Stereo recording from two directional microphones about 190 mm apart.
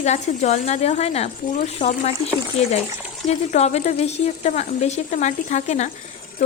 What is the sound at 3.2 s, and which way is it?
Speech, 35° left (ahead or behind).